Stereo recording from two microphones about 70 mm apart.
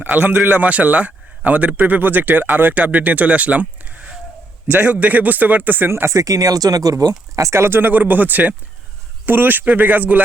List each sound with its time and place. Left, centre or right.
0.0 s speech: right